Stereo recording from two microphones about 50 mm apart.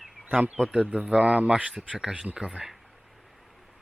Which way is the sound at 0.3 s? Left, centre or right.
Right.